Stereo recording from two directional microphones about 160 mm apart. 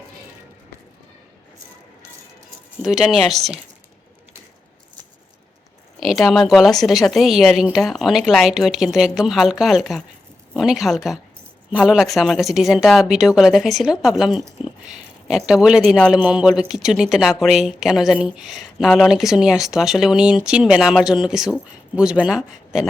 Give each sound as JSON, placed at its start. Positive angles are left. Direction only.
{"t": 2.8, "sound": "a woman's voice", "side_deg": -5}
{"t": 6.0, "sound": "a woman's voice", "side_deg": 0}